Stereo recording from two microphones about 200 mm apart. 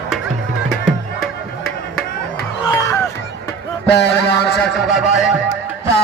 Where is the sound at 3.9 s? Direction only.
60° left (ahead or behind).